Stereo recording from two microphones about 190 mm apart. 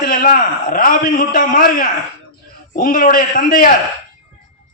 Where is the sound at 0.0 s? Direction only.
50° left (ahead or behind).